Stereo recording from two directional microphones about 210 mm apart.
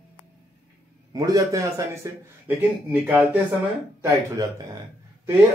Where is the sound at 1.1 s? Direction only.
15° right (ahead or behind).